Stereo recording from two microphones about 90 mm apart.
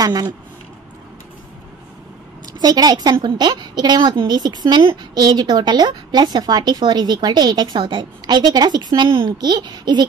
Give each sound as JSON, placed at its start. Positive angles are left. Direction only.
{"t": 0.0, "sound": "speech", "side_deg": -45}
{"t": 2.4, "sound": "a woman's voice", "side_deg": -45}